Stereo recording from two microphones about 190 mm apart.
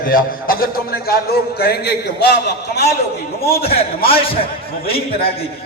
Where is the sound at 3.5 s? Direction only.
30° left (ahead or behind).